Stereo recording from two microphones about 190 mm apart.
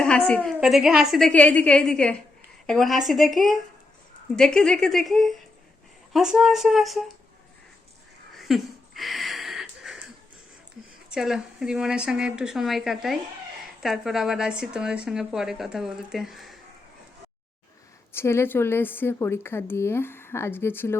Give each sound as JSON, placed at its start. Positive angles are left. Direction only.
{"t": 0.0, "sound": "speech", "side_deg": 5}
{"t": 8.4, "sound": "a sound", "side_deg": 0}
{"t": 11.1, "sound": "speech", "side_deg": -5}
{"t": 18.1, "sound": "a woman's voice", "side_deg": 15}